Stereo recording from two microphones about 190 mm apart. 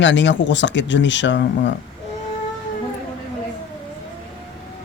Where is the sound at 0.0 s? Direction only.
70° left (ahead or behind).